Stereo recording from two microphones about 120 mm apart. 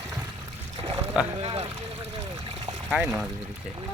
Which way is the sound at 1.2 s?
10° right (ahead or behind).